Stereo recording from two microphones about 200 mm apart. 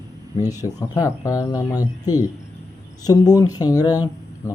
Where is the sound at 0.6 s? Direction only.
15° left (ahead or behind).